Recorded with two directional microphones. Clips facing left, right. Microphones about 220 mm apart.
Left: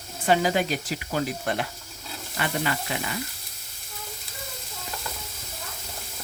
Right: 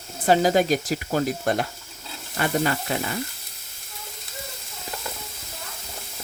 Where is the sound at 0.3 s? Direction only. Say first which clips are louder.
Right 4 dB; 40° right (ahead or behind).